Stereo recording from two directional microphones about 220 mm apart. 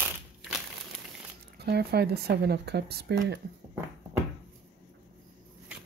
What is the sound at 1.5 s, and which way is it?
Speech, 45° right (ahead or behind).